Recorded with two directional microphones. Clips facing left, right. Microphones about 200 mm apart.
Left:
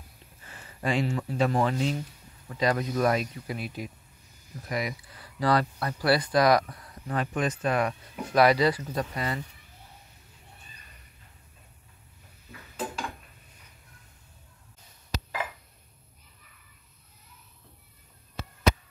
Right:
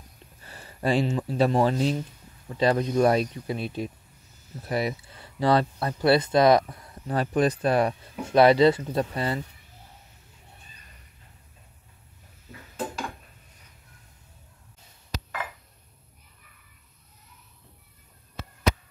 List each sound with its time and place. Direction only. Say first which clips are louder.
0.5 s a sound: right 4 dB; 35° right (ahead or behind)
1.0 s speech: right 3 dB; 20° right (ahead or behind)
1.4 s speech: right 4 dB; 35° right (ahead or behind)